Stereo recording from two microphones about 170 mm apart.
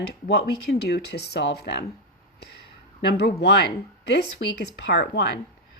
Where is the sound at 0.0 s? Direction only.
80° left.